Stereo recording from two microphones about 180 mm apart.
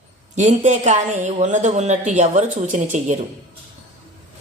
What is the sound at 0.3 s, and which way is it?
Speech, 40° right (ahead or behind).